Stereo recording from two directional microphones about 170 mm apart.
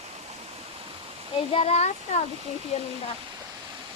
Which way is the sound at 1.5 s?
35° left (ahead or behind).